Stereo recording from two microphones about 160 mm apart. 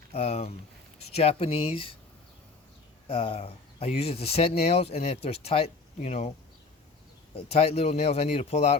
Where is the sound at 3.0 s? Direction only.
35° left (ahead or behind).